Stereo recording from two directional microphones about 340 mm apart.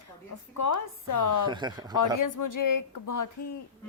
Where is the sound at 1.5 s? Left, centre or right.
Centre.